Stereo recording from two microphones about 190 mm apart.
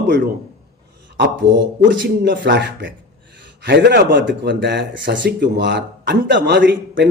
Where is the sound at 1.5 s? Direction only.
70° right (ahead or behind).